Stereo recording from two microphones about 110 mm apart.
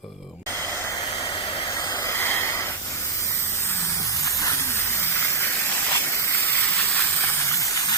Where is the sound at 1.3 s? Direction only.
50° left (ahead or behind).